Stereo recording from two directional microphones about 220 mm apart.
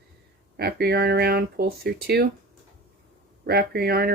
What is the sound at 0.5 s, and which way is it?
Speech, 45° right (ahead or behind).